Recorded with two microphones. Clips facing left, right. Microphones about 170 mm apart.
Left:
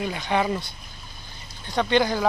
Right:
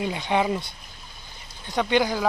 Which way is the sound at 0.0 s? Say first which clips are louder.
Right 1 dB; 20° right (ahead or behind).